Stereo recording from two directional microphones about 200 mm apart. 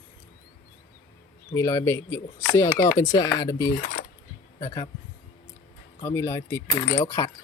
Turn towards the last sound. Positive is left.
turn(degrees=15)  # may be behind; listen again after turning